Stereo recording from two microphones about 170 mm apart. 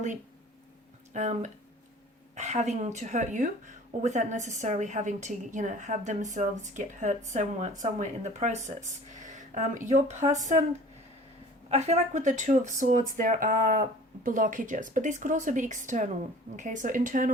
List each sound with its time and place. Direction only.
1.1 s speech: 45° right (ahead or behind)
11.7 s speech: 40° right (ahead or behind)